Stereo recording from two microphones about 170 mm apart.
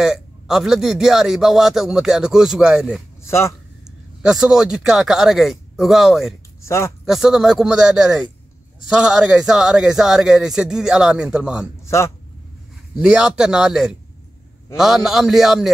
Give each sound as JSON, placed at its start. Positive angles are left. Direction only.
{"t": 0.0, "sound": "speech", "side_deg": -5}
{"t": 3.3, "sound": "speech", "side_deg": 15}
{"t": 3.8, "sound": "speech", "side_deg": -5}
{"t": 6.6, "sound": "speech", "side_deg": 15}
{"t": 7.1, "sound": "speech", "side_deg": 0}
{"t": 11.8, "sound": "a sound", "side_deg": 15}
{"t": 13.0, "sound": "speech", "side_deg": -5}